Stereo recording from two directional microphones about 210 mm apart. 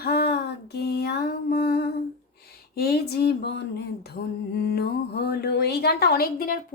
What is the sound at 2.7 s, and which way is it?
Mantra, 50° left (ahead or behind).